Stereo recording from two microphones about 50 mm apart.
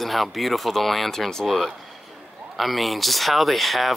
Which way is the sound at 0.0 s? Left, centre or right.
Centre.